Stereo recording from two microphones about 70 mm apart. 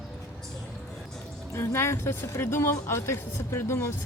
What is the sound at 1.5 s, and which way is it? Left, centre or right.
Speech, left.